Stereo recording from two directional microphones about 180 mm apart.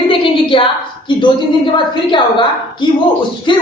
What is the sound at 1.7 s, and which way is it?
A woman's voice, 25° left (ahead or behind).